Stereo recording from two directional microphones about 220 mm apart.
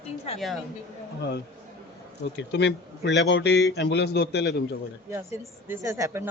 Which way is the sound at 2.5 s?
50° left (ahead or behind).